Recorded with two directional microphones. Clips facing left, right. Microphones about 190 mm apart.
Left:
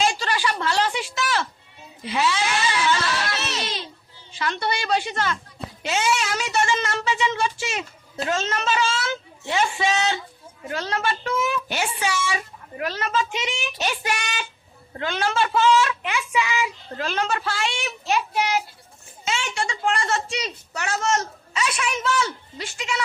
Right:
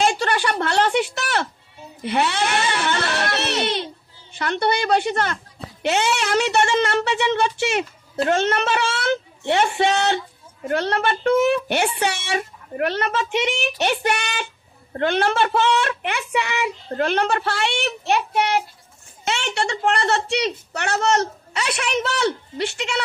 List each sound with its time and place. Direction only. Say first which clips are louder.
0.0 s a woman's voice: right 3 dB; 55° right (ahead or behind)